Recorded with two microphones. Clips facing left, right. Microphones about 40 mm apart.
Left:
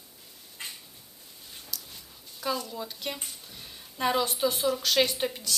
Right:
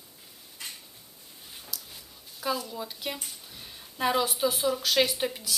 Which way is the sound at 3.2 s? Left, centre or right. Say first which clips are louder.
Even; centre.